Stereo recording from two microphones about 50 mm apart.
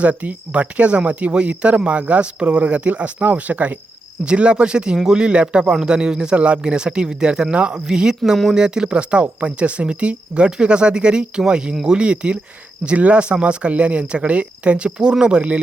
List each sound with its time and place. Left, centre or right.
0.0 s speech: right
4.3 s speech: right